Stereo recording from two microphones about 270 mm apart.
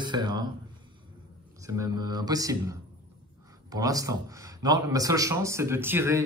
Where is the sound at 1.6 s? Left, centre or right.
Centre.